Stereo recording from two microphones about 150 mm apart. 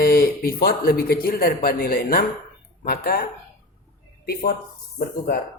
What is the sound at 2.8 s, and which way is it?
Speech, 90° left.